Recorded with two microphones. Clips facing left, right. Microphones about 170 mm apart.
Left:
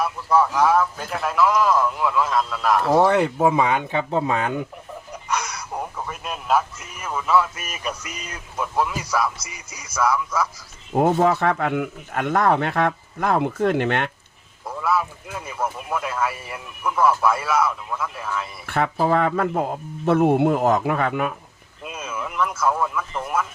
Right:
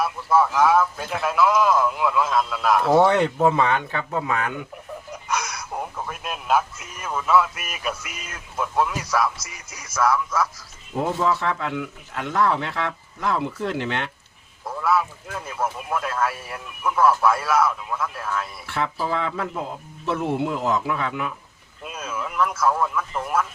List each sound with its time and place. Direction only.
0.0 s a man's voice: centre (ahead or behind)
4.1 s speech: 30° left (ahead or behind)
5.3 s a man's voice: centre (ahead or behind)
10.9 s speech: 60° left (ahead or behind)
14.8 s a man's voice: centre (ahead or behind)
18.6 s speech: 55° left (ahead or behind)
21.8 s a man's voice: centre (ahead or behind)